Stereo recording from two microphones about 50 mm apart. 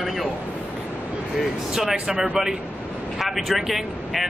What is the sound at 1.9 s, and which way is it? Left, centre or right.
Speech, centre.